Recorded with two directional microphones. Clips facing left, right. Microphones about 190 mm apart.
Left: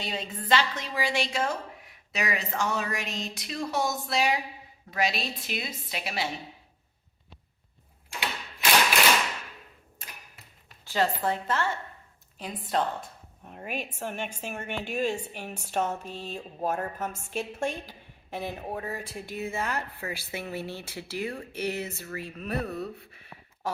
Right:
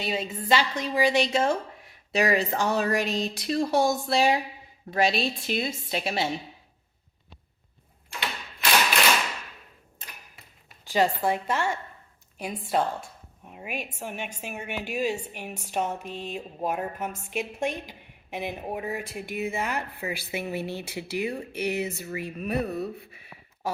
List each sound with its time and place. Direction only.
0.0 s a woman's voice: 10° right (ahead or behind); by 6.2 s 30° right (ahead or behind)
10.8 s a woman's voice: 15° right (ahead or behind)